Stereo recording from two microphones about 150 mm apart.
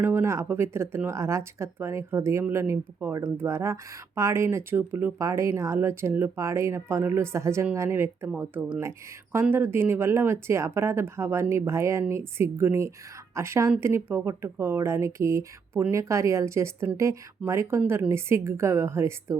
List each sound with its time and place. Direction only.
0.0 s speech: 15° right (ahead or behind)